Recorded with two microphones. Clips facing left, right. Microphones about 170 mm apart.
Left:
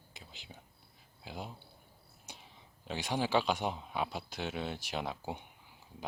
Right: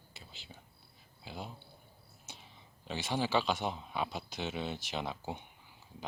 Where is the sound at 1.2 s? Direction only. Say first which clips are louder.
Left 1 dB; 10° left (ahead or behind).